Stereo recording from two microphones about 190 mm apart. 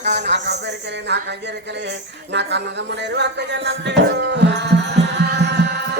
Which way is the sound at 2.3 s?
65° right (ahead or behind).